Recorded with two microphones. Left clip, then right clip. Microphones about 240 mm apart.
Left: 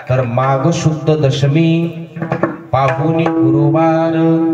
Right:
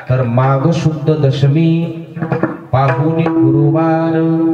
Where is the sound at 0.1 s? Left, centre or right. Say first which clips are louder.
Left 1 dB; centre.